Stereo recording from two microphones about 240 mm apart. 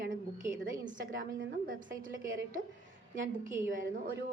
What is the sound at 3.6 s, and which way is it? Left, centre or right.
Speech, right.